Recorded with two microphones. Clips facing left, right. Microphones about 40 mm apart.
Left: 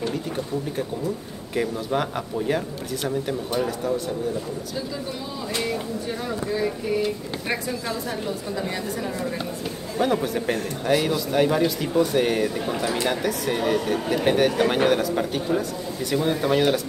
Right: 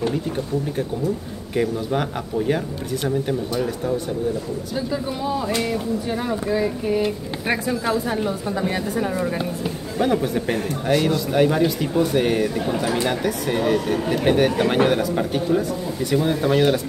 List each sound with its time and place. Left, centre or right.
1.5 s a man's voice: centre
5.6 s speech: centre
7.0 s speech: right
9.9 s a man's voice: centre